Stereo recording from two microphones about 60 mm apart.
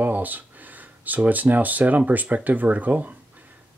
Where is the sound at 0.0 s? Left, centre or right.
Right.